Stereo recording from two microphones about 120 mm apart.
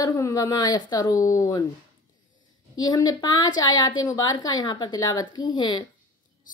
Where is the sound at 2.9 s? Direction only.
35° left (ahead or behind).